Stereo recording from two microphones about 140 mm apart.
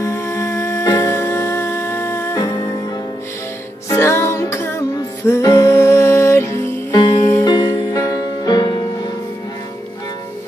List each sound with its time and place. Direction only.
0.0 s music: 20° left (ahead or behind)
3.9 s music: 20° left (ahead or behind)